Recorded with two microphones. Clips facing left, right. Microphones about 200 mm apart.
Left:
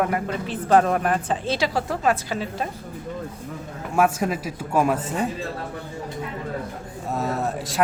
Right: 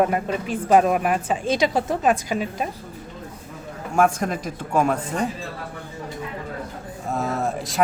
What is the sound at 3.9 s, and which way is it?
A man's voice, 5° left (ahead or behind).